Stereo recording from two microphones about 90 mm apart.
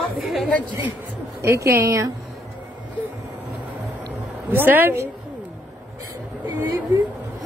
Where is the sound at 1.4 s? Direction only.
30° right (ahead or behind).